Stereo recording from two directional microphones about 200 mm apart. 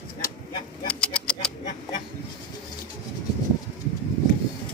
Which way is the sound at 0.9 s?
5° left (ahead or behind).